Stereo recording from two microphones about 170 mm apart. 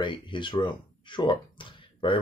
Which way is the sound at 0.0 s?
30° left (ahead or behind).